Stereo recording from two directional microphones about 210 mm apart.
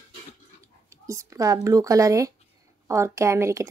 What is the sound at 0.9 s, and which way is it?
A woman's voice, 15° right (ahead or behind).